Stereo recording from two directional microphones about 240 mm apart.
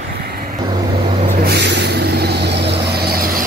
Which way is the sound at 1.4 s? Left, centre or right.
Right.